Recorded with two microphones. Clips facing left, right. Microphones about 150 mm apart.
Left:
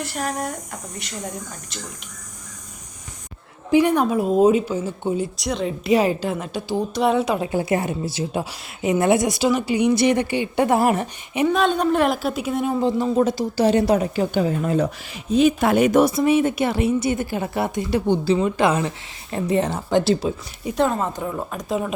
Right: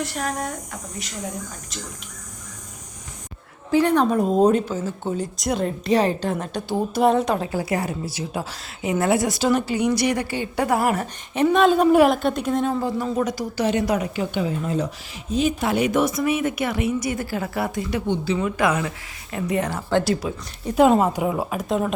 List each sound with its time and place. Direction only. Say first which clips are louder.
0.0 s a woman's voice: even; centre (ahead or behind)
3.7 s a woman's voice: left 1 dB; 15° left (ahead or behind)
5.4 s a woman's voice: right 1 dB; centre (ahead or behind)
5.8 s a woman's voice: left 3 dB; 10° left (ahead or behind)
7.4 s a woman's voice: left 3 dB; 25° left (ahead or behind)
11.4 s a woman's voice: right 3 dB; centre (ahead or behind)
12.8 s a woman's voice: left 4 dB; 25° left (ahead or behind)
20.7 s a woman's voice: right 5 dB; 15° right (ahead or behind)